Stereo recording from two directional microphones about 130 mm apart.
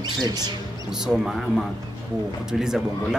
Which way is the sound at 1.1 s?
Centre (ahead or behind).